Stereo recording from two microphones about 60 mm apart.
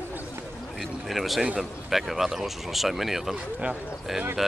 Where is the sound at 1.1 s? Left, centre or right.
Centre.